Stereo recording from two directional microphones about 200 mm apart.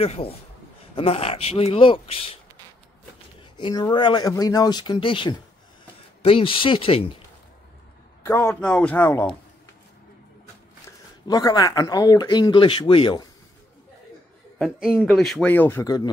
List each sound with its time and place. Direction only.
0.0 s speech: 30° left (ahead or behind)
3.5 s speech: 20° left (ahead or behind)
8.2 s speech: 10° left (ahead or behind)
11.2 s speech: 20° left (ahead or behind)
14.9 s speech: 5° left (ahead or behind)